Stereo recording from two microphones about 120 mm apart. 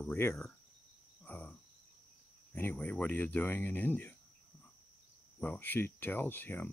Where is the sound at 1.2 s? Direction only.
10° left (ahead or behind).